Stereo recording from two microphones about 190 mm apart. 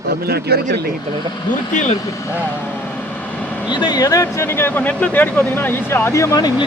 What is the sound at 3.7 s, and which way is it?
Speech, 20° left (ahead or behind).